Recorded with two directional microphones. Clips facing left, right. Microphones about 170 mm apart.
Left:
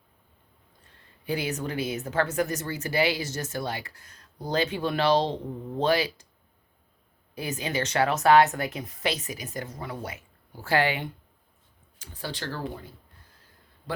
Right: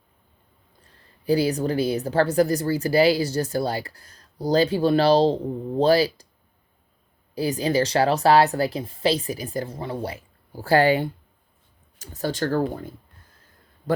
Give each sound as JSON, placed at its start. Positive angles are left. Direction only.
{"t": 0.9, "sound": "a woman's voice", "side_deg": -35}
{"t": 7.3, "sound": "a woman's voice", "side_deg": -35}